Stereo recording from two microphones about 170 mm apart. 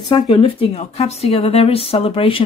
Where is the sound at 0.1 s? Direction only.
25° left (ahead or behind).